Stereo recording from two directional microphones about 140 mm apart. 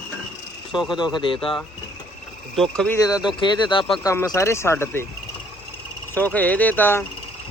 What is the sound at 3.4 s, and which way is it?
Speech, 35° left (ahead or behind).